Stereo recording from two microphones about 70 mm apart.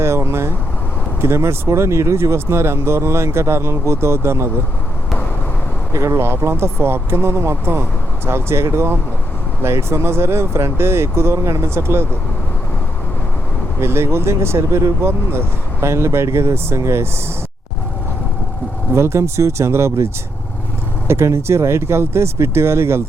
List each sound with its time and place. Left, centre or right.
0.0 s vehicle: right
1.2 s speech: right
5.9 s speech: right
13.7 s speech: right
18.9 s speech: right
21.1 s speech: right